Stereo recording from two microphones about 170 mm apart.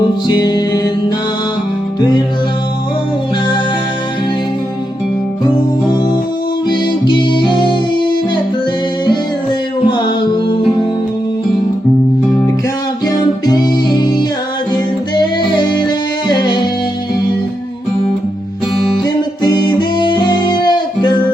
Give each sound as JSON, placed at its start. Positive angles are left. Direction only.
{"t": 0.3, "sound": "music", "side_deg": 25}
{"t": 6.7, "sound": "music", "side_deg": 25}
{"t": 13.1, "sound": "music", "side_deg": 25}
{"t": 19.0, "sound": "music", "side_deg": 25}